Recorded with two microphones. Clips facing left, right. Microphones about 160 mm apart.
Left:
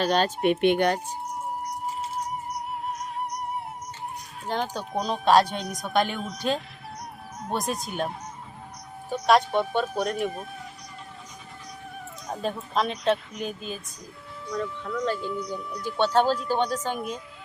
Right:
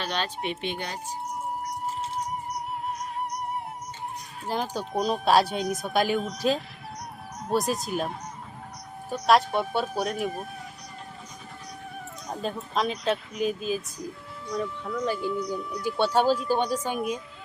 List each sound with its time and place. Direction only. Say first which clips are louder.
0.0 s speech: left 8 dB; 45° left (ahead or behind); by 0.9 s 60° left (ahead or behind)
2.8 s music: even; centre (ahead or behind)
4.4 s speech: even; 5° right (ahead or behind)
12.3 s a woman's voice: left 2 dB; centre (ahead or behind)